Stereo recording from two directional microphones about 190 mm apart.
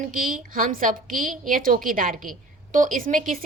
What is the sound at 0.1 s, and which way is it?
A woman's voice, 45° right (ahead or behind).